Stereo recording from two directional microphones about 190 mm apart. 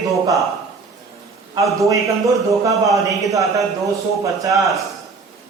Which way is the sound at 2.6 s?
15° right (ahead or behind).